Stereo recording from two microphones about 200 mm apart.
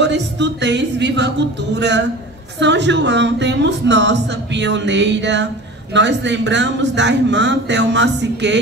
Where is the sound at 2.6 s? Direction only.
60° right (ahead or behind).